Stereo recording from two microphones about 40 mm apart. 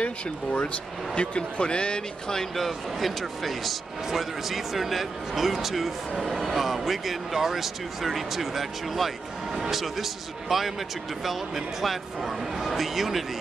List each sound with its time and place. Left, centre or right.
0.0 s speech: left
2.5 s speech: centre